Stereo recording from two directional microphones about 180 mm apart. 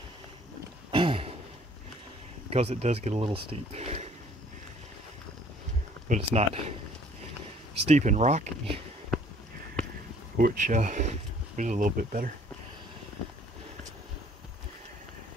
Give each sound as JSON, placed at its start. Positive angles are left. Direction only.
{"t": 0.9, "sound": "a sound", "side_deg": -30}
{"t": 2.5, "sound": "speech", "side_deg": -35}
{"t": 6.0, "sound": "speech", "side_deg": -35}
{"t": 7.7, "sound": "speech", "side_deg": -40}
{"t": 10.3, "sound": "speech", "side_deg": -50}